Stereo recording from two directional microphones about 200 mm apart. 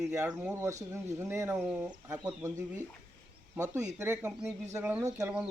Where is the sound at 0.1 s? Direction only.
15° right (ahead or behind).